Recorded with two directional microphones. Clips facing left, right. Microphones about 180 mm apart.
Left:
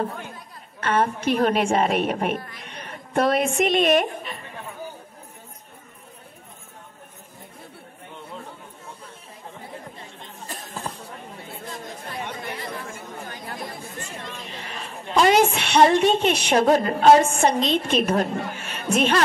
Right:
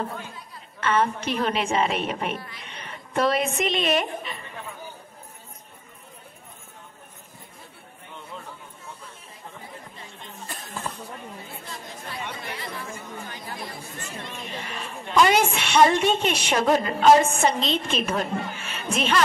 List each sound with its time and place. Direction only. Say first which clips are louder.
0.7 s a woman's voice: left 1 dB; 45° left (ahead or behind)
10.5 s a sound: left 1 dB; 35° left (ahead or behind)
11.6 s chatter: left 3 dB; 45° left (ahead or behind)
14.6 s a woman's voice: right 1 dB; 35° left (ahead or behind)